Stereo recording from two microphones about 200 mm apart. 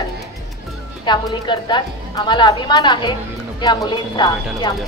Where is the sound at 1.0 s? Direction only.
20° left (ahead or behind).